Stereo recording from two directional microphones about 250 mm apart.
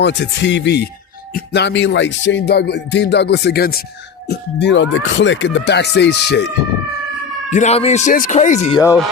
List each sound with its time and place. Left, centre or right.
0.0 s speech: left
7.5 s speech: left